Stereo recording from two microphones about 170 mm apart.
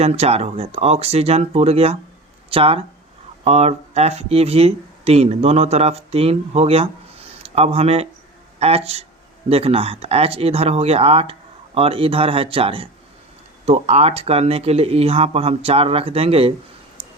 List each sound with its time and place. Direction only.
0.0 s speech: 35° right (ahead or behind)